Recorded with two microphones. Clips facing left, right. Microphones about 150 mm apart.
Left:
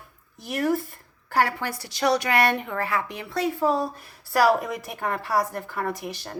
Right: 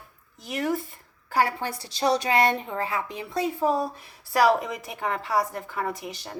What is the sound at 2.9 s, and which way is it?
Speech, 70° left (ahead or behind).